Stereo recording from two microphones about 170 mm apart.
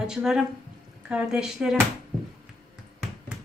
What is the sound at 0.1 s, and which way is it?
Speech, 5° right (ahead or behind).